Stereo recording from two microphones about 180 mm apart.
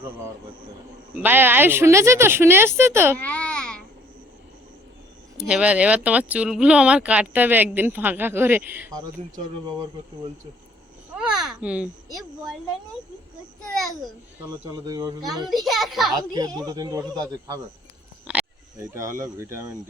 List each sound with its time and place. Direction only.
1.1 s speech: 10° right (ahead or behind)
3.2 s babbling: 5° left (ahead or behind)
5.4 s speech: 5° right (ahead or behind)
11.3 s speech: 5° right (ahead or behind)
14.8 s speech: 20° right (ahead or behind)
15.6 s a child's voice: centre (ahead or behind)
16.1 s speech: 20° right (ahead or behind)
18.3 s a sound: 5° right (ahead or behind)
18.8 s speech: 15° right (ahead or behind)